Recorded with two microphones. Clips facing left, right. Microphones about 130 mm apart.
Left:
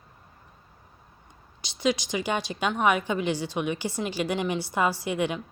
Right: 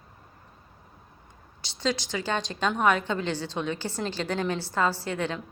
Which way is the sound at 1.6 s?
15° left (ahead or behind).